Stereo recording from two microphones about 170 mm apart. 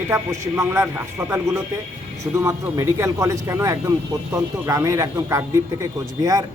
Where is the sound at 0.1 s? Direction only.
15° right (ahead or behind).